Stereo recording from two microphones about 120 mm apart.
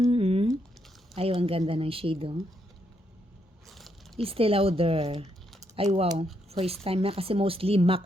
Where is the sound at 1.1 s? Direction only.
55° right (ahead or behind).